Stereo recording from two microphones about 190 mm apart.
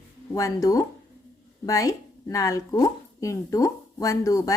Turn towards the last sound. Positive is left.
turn(degrees=15)  # may be behind; listen again after turning